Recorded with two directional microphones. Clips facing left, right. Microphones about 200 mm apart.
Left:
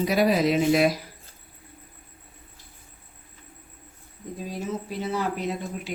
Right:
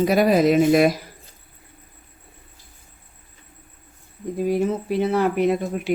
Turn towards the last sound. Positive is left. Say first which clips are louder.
# right 10 dB
turn(degrees=-60)  # may be behind; listen again after turning